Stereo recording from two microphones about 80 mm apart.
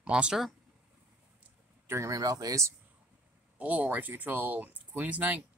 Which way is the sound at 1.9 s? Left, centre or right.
Right.